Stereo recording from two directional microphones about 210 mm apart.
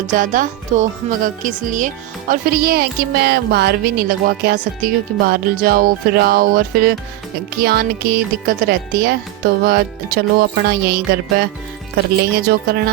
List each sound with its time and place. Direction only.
0.2 s speech: 40° right (ahead or behind)